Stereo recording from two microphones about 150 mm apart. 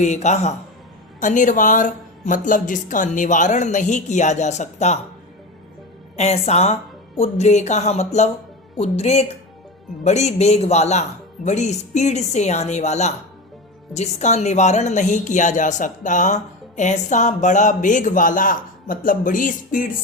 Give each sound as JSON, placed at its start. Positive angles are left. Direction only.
{"t": 0.0, "sound": "a woman's voice", "side_deg": 50}
{"t": 6.1, "sound": "a woman's voice", "side_deg": 45}